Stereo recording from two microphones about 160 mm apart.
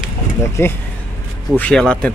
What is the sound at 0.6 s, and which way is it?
Speech, 15° left (ahead or behind).